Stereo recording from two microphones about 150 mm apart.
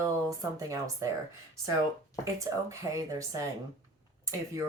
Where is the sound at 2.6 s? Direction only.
20° right (ahead or behind).